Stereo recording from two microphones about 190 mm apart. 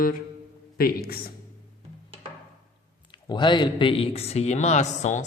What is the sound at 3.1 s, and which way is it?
Speech, 25° left (ahead or behind).